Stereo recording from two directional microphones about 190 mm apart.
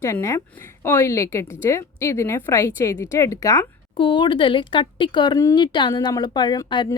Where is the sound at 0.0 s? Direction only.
15° left (ahead or behind).